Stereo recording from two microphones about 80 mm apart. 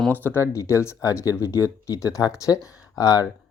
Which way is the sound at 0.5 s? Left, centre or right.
Left.